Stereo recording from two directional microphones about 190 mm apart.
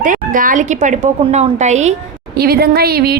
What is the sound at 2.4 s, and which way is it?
Speech, 55° right (ahead or behind).